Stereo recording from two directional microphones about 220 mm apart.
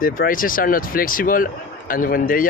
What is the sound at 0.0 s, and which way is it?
Speech, 40° left (ahead or behind).